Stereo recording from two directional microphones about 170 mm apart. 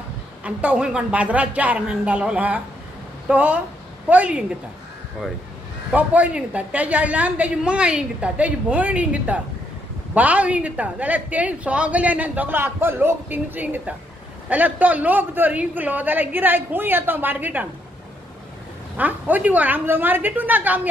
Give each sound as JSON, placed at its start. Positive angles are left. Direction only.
{"t": 0.4, "sound": "a woman's voice", "side_deg": -10}
{"t": 5.9, "sound": "a woman's voice", "side_deg": -10}
{"t": 18.9, "sound": "a woman's voice", "side_deg": -10}